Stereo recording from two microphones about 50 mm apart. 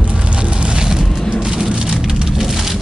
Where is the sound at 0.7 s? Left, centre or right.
Centre.